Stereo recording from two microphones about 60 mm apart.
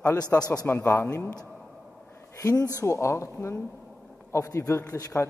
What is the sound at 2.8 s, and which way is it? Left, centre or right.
Speech, left.